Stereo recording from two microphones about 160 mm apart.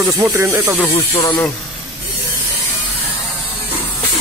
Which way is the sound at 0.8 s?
20° left (ahead or behind).